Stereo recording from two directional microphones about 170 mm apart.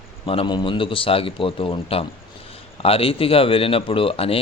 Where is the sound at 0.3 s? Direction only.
30° left (ahead or behind).